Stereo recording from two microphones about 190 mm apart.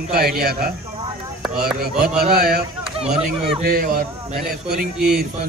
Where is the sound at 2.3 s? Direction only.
55° right (ahead or behind).